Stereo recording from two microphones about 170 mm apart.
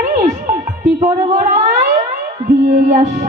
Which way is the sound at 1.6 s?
40° right (ahead or behind).